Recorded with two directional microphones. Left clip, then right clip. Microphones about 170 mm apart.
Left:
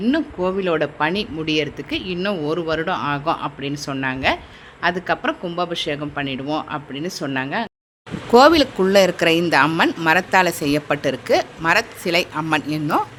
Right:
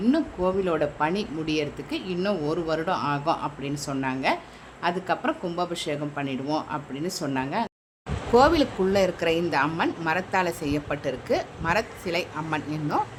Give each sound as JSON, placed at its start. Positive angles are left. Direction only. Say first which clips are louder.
{"t": 0.0, "sound": "speech", "louder": "left 4 dB", "side_deg": 15}
{"t": 8.3, "sound": "a woman's voice", "louder": "left 7 dB", "side_deg": 35}